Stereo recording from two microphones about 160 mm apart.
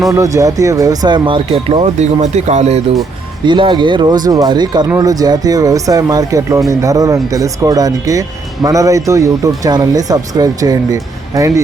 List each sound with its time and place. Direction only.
0.1 s speech: 20° right (ahead or behind); by 2.8 s 45° right (ahead or behind)
3.4 s speech: 30° right (ahead or behind)